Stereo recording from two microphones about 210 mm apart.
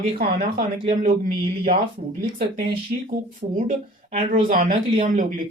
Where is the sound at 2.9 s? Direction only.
40° right (ahead or behind).